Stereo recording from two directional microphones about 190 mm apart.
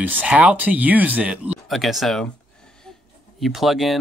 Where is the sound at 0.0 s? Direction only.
5° right (ahead or behind).